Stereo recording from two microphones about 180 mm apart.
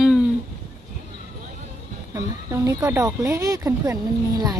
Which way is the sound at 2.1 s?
20° right (ahead or behind).